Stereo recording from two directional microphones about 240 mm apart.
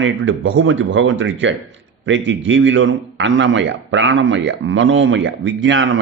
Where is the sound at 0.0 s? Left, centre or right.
Right.